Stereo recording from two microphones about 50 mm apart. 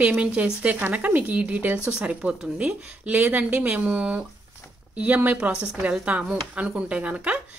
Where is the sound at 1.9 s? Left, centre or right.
Right.